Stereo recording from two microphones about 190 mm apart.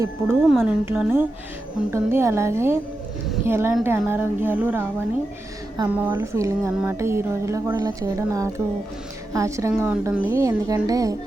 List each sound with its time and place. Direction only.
0.0 s speech: 10° right (ahead or behind)
0.5 s speech: centre (ahead or behind); by 11.2 s 20° right (ahead or behind)